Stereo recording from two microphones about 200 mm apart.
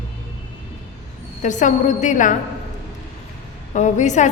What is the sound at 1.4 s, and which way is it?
Speech, 40° left (ahead or behind).